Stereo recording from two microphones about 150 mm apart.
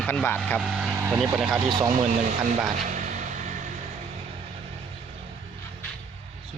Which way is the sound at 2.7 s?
55° right (ahead or behind).